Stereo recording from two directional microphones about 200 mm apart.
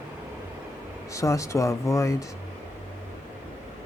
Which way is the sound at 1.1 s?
15° left (ahead or behind).